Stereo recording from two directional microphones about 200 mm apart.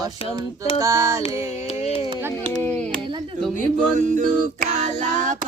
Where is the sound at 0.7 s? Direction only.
15° right (ahead or behind).